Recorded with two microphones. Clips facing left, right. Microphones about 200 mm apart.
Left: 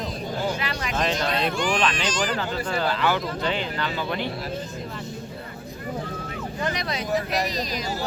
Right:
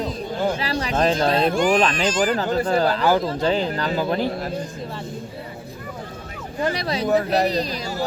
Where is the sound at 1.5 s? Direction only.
45° right (ahead or behind).